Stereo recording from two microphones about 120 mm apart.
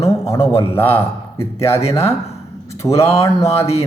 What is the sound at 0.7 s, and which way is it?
A man's voice, 15° left (ahead or behind).